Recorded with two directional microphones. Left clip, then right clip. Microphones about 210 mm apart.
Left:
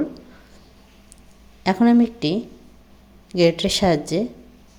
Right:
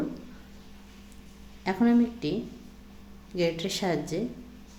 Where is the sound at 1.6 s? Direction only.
40° left (ahead or behind).